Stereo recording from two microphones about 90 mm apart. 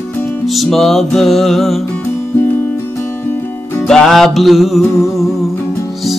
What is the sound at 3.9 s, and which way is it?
Music, 5° left (ahead or behind).